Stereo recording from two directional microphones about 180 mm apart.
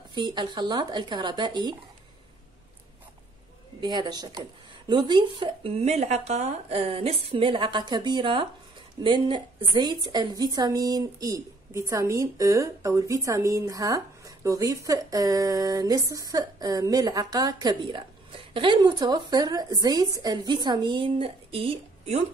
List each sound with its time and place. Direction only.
0.1 s a woman's voice: 25° right (ahead or behind)
3.8 s a woman's voice: 25° right (ahead or behind)